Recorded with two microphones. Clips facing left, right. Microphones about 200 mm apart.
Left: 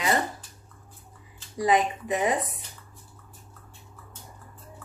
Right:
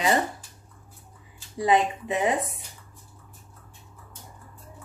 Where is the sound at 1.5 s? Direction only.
25° right (ahead or behind).